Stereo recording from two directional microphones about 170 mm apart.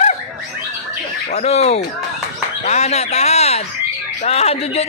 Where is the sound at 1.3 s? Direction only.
40° left (ahead or behind).